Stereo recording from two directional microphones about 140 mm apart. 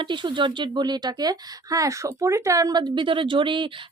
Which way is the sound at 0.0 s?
35° right (ahead or behind).